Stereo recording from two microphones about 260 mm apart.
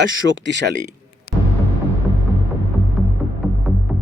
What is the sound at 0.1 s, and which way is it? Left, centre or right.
Speech, right.